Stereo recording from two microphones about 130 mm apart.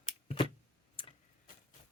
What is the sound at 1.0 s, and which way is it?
Tick-tock, 40° left (ahead or behind).